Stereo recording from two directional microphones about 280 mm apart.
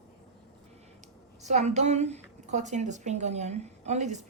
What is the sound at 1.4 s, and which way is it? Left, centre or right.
A woman's voice, right.